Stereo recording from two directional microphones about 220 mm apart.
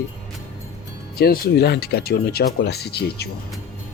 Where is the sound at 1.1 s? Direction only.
45° left (ahead or behind).